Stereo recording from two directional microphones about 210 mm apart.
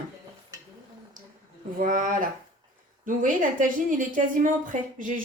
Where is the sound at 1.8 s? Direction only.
40° right (ahead or behind).